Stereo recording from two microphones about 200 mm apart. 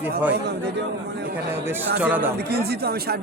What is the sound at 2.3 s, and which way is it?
Speech, 55° right (ahead or behind).